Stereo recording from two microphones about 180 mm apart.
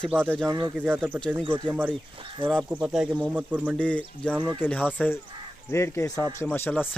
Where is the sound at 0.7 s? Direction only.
5° right (ahead or behind).